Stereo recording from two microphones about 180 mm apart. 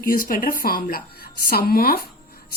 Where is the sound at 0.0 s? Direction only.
50° left (ahead or behind).